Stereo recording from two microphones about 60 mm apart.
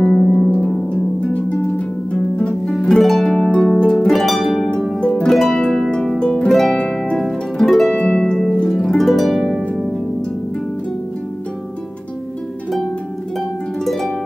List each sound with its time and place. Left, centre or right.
0.0 s harp: centre
0.5 s harp: left
3.0 s harp: centre
3.3 s harp: centre
5.0 s harp: centre
5.3 s harp: centre
6.5 s music: centre
6.8 s harp: centre
7.2 s harp: centre
7.9 s harp: centre
13.8 s music: centre